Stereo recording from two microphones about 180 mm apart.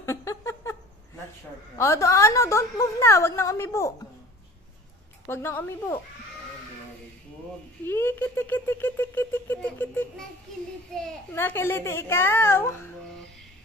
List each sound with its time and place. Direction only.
0.0 s a sound: 15° left (ahead or behind)
1.8 s speech: 15° left (ahead or behind)
5.3 s speech: 10° left (ahead or behind)
7.8 s speech: 10° left (ahead or behind)